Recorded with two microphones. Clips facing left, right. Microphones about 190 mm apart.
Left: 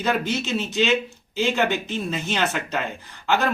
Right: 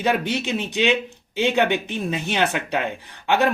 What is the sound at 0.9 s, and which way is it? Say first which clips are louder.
Speech: right 1 dB; 60° right (ahead or behind).